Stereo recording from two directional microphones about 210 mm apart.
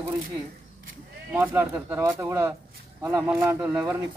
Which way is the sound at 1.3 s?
10° right (ahead or behind).